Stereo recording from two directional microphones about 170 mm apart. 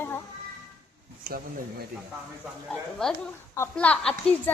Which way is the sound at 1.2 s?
60° right (ahead or behind).